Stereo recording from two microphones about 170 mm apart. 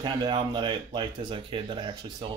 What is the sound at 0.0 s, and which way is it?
Speech, 25° right (ahead or behind).